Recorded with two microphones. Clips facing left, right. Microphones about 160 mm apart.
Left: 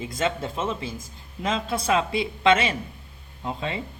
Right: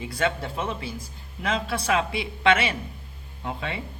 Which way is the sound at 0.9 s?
45° left (ahead or behind).